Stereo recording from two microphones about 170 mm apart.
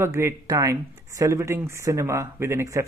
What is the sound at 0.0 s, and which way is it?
Speech, 15° right (ahead or behind).